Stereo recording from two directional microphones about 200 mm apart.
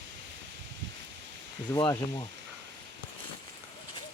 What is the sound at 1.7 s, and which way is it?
Speech, 20° left (ahead or behind).